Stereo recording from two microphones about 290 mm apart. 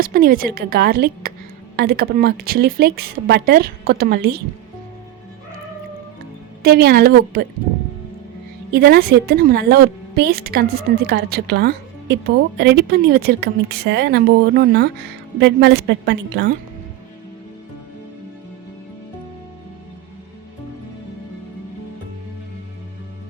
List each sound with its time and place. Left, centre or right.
0.0 s a woman's voice: right
6.6 s a woman's voice: right
8.7 s a woman's voice: right